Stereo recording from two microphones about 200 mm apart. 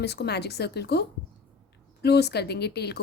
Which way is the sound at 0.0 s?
55° left (ahead or behind).